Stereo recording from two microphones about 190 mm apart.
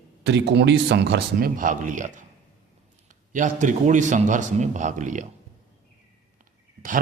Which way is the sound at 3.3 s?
40° right (ahead or behind).